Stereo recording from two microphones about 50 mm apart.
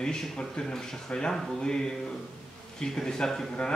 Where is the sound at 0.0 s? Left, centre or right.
Centre.